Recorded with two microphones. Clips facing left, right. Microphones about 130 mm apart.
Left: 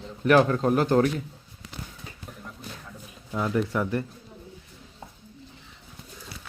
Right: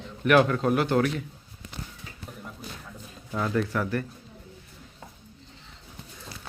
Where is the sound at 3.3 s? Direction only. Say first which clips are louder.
Left 1 dB; 15° left (ahead or behind).